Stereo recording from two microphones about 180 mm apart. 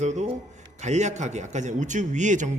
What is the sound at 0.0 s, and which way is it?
A man's voice, 40° right (ahead or behind).